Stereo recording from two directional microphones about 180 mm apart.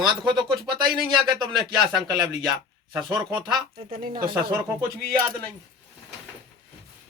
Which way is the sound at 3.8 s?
30° right (ahead or behind).